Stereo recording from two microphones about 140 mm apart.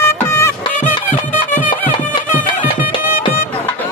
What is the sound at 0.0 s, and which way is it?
Music, 20° left (ahead or behind).